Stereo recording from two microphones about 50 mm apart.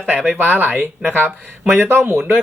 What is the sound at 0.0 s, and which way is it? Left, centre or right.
Speech, right.